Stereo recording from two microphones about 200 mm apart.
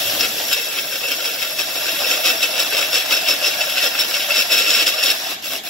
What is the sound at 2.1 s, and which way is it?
Engine, centre (ahead or behind).